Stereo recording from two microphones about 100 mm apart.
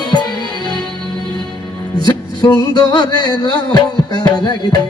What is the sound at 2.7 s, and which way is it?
Music, 45° left (ahead or behind).